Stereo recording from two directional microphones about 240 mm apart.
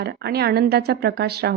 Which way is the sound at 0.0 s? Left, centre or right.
Right.